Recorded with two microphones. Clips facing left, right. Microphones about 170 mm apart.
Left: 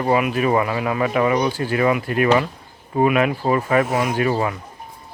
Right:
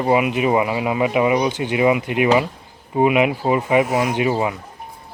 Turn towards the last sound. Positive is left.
turn(degrees=-15)  # may be behind; listen again after turning